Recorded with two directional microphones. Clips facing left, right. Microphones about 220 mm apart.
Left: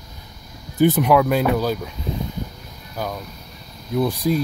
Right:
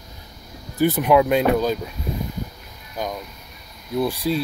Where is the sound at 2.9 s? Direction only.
15° right (ahead or behind).